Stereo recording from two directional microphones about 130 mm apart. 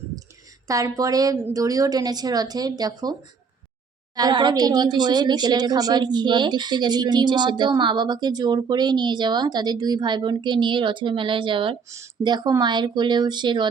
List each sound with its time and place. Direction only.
0.7 s speech: 25° right (ahead or behind)